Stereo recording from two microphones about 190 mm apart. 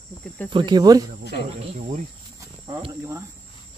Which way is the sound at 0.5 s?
25° right (ahead or behind).